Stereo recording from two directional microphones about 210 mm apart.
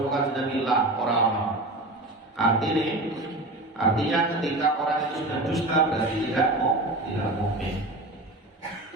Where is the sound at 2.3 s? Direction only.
Centre (ahead or behind).